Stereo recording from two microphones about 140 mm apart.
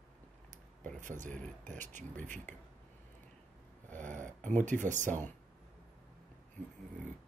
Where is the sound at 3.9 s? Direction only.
65° right (ahead or behind).